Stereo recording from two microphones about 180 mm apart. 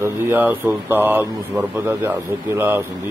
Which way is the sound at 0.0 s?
10° right (ahead or behind).